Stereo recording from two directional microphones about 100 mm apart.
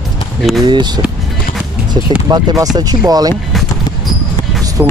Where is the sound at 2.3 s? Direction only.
35° right (ahead or behind).